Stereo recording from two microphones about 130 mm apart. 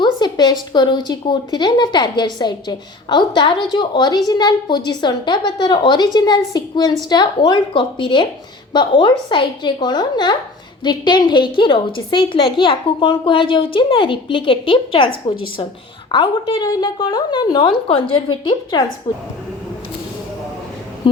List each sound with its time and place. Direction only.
0.0 s a woman's voice: 35° left (ahead or behind)